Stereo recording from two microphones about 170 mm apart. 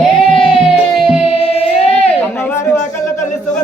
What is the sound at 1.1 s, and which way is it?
Music, centre (ahead or behind).